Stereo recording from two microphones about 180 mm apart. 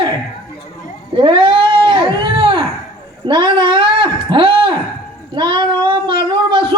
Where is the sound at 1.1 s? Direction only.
30° right (ahead or behind).